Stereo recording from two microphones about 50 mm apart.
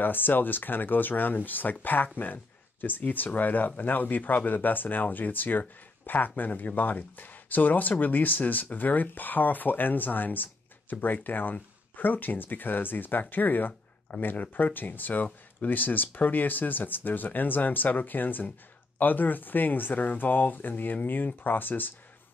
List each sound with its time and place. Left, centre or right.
0.0 s speech: left